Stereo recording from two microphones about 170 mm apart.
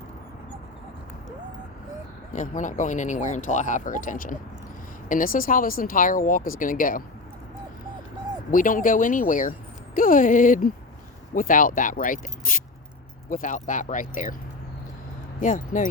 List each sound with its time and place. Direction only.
2.3 s speech: 50° left (ahead or behind)
8.4 s speech: 50° left (ahead or behind)
15.4 s speech: 50° left (ahead or behind)